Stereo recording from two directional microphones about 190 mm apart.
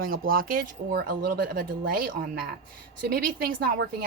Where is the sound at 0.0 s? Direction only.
50° right (ahead or behind).